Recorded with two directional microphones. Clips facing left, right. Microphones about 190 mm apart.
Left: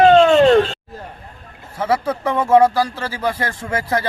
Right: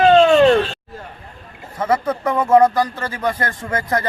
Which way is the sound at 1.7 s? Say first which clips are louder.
Even; 10° left (ahead or behind).